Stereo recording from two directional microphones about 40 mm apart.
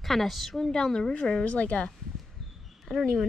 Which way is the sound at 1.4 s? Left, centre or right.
Left.